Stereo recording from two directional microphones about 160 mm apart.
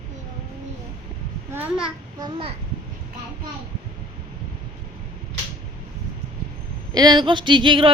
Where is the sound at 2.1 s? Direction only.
30° right (ahead or behind).